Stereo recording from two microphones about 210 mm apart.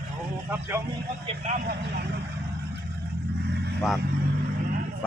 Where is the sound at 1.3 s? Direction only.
35° right (ahead or behind).